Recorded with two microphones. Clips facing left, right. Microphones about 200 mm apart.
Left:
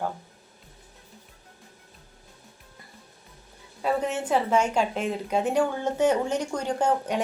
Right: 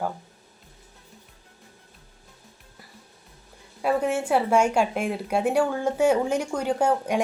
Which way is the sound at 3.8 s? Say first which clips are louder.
Right 3 dB; 10° right (ahead or behind).